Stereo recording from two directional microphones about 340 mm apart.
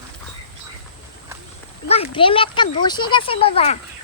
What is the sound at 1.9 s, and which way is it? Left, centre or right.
A child's voice, centre.